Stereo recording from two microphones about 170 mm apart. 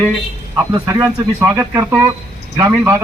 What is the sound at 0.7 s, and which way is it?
Speech, 20° right (ahead or behind).